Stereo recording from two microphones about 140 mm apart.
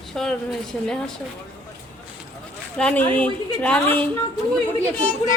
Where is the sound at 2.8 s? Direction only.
10° left (ahead or behind).